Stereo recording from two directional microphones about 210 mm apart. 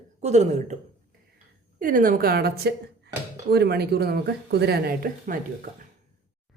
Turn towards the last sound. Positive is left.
turn(degrees=-40)  # may be behind; listen again after turning